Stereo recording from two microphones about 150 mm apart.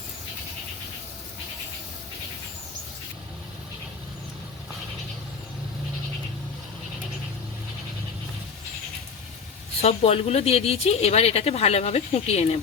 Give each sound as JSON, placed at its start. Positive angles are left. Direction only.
{"t": 9.8, "sound": "speech", "side_deg": 45}